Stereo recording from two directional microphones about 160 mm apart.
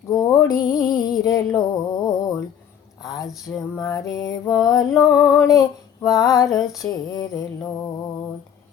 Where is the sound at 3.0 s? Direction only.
25° left (ahead or behind).